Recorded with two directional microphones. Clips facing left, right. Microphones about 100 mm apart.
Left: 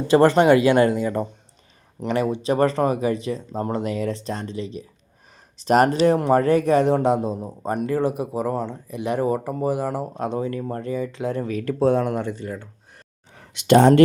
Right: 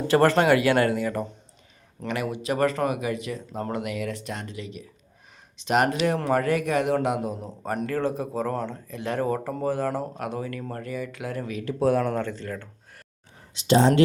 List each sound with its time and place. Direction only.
0.1 s speech: 20° left (ahead or behind)
7.3 s speech: 20° left (ahead or behind)
10.2 s speech: 25° left (ahead or behind)
11.5 s speech: 45° left (ahead or behind)
11.8 s speech: 25° left (ahead or behind)
13.3 s speech: 65° left (ahead or behind)